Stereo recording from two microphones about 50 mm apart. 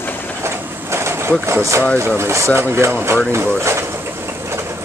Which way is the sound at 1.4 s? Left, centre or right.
Right.